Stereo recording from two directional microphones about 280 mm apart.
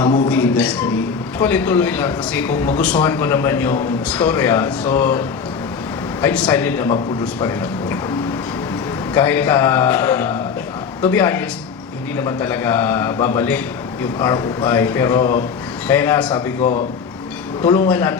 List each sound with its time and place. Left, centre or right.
0.3 s a man's voice: centre
6.2 s a man's voice: centre
9.1 s a man's voice: centre
16.6 s a man's voice: left
17.6 s a man's voice: centre